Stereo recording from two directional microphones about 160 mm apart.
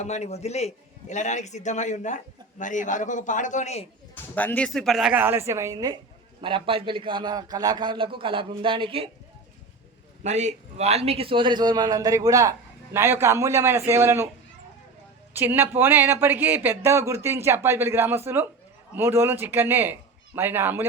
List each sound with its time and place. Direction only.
0.0 s a man's voice: 45° left (ahead or behind)
4.1 s a man's voice: 10° left (ahead or behind); by 9.0 s 35° right (ahead or behind)
10.2 s a man's voice: 45° right (ahead or behind); by 14.3 s 15° right (ahead or behind)
15.3 s speech: 15° right (ahead or behind)